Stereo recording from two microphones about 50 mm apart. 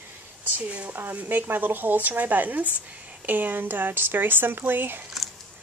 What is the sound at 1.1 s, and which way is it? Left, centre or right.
Speech, right.